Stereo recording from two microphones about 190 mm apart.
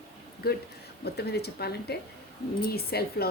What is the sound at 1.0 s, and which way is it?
A woman's voice, 60° left (ahead or behind).